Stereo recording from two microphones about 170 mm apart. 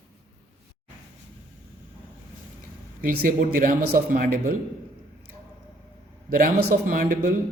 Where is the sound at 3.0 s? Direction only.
55° right (ahead or behind).